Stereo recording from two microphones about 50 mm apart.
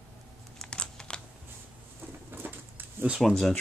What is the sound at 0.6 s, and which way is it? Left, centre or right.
Computer keyboard, centre.